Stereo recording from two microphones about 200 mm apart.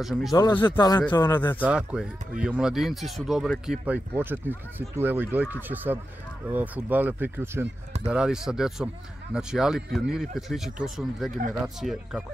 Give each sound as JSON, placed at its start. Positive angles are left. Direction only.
{"t": 0.0, "sound": "a man's voice", "side_deg": 0}
{"t": 0.3, "sound": "speech", "side_deg": 20}
{"t": 1.6, "sound": "a man's voice", "side_deg": -5}